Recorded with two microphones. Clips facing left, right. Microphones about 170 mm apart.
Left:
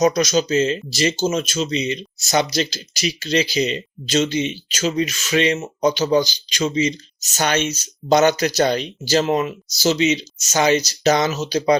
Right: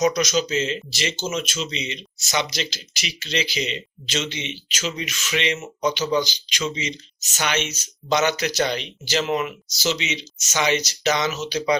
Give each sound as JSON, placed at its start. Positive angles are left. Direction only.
{"t": 0.0, "sound": "speech", "side_deg": 35}